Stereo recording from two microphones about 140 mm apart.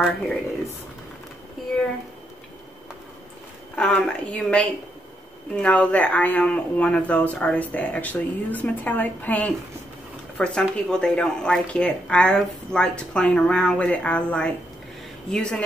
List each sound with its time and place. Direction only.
3.7 s speech: 5° left (ahead or behind)